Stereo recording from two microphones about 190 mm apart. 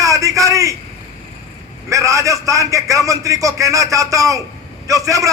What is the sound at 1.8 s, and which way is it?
A man's voice, 15° right (ahead or behind).